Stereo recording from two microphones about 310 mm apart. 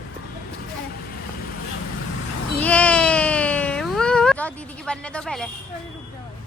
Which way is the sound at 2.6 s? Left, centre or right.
Centre.